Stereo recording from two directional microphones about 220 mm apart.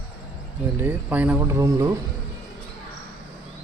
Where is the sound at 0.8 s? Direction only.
10° right (ahead or behind).